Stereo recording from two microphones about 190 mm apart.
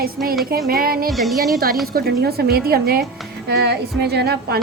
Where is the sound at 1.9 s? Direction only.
55° right (ahead or behind).